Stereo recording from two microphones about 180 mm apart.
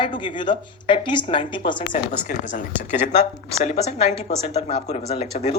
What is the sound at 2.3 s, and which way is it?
Speech, 45° left (ahead or behind).